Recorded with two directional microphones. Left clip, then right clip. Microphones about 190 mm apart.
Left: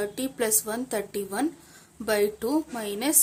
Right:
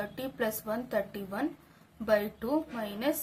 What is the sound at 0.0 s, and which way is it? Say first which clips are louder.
A woman's voice: left 5 dB; 40° left (ahead or behind).